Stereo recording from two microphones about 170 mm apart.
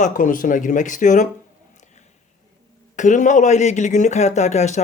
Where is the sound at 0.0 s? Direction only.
50° left (ahead or behind).